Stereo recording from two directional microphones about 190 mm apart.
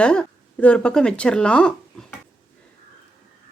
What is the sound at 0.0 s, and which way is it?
Speech, 5° left (ahead or behind).